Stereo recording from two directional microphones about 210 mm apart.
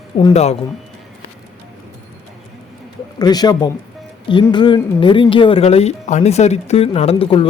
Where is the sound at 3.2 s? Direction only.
20° left (ahead or behind).